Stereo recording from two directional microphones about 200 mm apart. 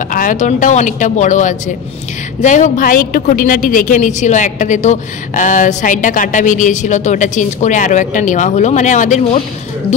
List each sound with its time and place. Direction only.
0.1 s a woman's voice: 40° left (ahead or behind)